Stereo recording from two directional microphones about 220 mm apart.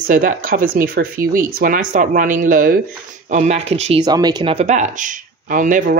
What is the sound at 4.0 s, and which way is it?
Speech, 20° right (ahead or behind).